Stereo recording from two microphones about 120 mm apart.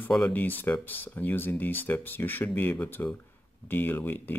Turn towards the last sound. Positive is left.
turn(degrees=15)  # may be behind; listen again after turning